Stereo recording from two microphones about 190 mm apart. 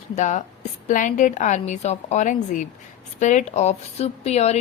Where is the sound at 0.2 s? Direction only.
35° left (ahead or behind).